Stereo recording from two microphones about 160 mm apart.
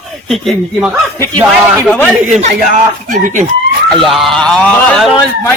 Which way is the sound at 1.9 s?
10° left (ahead or behind).